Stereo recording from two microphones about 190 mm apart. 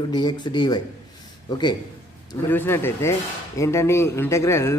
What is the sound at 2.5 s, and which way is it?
Speech, 10° left (ahead or behind).